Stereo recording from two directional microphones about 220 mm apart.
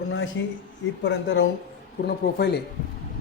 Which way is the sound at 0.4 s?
55° left (ahead or behind).